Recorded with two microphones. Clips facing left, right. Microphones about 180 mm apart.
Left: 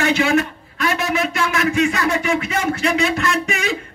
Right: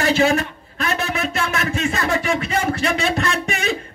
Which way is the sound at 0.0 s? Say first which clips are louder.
Even; 35° right (ahead or behind).